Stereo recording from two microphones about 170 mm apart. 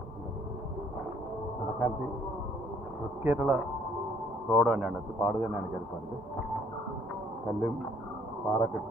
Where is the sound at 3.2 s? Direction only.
10° right (ahead or behind).